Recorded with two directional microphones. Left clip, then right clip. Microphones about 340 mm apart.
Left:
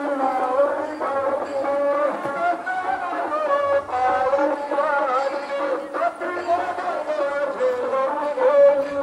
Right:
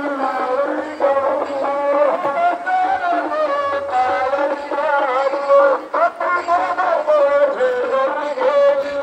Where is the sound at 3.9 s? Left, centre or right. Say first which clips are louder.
Right 3 dB; right.